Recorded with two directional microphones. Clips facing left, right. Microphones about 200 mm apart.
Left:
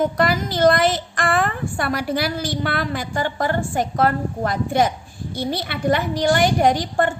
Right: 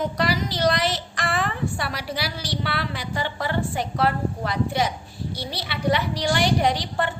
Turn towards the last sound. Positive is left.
turn(degrees=45)  # may be behind; listen again after turning